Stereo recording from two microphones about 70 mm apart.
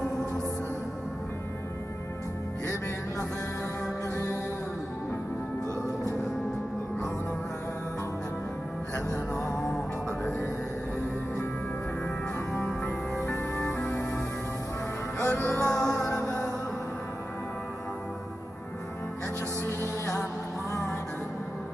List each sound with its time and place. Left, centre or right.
13.2 s music: left
15.2 s music: left
15.6 s music: left
19.6 s music: left